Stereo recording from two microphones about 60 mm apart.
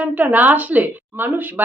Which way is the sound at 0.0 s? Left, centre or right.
Right.